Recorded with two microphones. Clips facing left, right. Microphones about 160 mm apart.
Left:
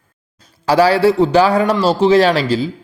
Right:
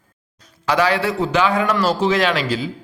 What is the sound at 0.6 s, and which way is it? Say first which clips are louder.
A man's voice: left 7 dB; 30° left (ahead or behind).